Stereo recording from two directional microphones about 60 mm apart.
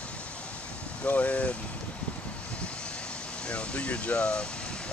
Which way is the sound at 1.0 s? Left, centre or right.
Left.